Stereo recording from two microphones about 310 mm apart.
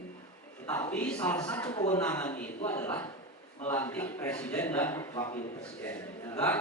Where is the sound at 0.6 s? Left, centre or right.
Centre.